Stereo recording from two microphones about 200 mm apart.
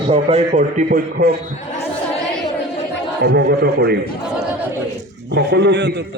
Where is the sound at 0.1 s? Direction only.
35° right (ahead or behind).